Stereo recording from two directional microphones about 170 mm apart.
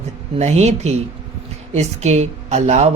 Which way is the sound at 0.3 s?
40° right (ahead or behind).